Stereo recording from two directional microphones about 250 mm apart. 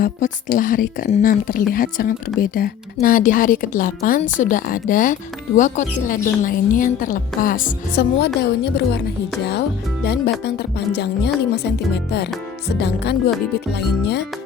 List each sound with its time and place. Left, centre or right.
0.0 s a woman's voice: left